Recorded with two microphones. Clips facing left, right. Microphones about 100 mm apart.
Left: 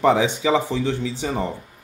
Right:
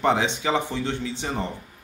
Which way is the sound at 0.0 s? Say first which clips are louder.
Left 4 dB; 70° left (ahead or behind).